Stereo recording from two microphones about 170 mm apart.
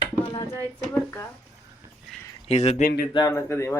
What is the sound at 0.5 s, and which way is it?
Speech, 15° right (ahead or behind).